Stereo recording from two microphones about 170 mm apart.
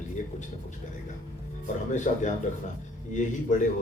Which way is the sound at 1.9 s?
45° left (ahead or behind).